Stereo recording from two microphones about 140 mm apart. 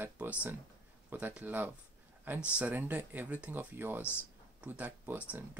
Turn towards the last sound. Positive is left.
turn(degrees=-10)  # may be behind; listen again after turning